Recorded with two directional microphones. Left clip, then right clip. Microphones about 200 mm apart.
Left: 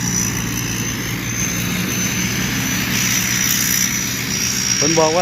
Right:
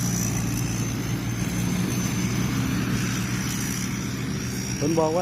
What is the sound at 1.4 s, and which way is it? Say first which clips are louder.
Vehicle: left 9 dB; 60° right (ahead or behind).